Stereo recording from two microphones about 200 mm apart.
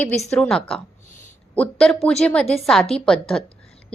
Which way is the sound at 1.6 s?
5° left (ahead or behind).